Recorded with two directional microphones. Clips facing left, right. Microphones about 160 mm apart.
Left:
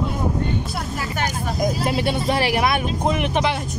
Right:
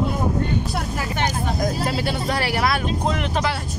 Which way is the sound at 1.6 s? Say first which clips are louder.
Left 4 dB; 20° left (ahead or behind).